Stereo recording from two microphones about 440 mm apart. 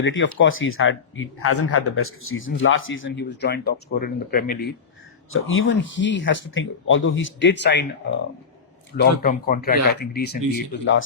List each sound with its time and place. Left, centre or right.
0.0 s speech: left